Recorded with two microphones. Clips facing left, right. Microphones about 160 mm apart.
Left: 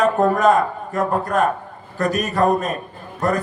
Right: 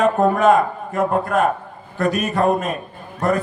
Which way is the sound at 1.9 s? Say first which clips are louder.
Right 1 dB; 40° left (ahead or behind).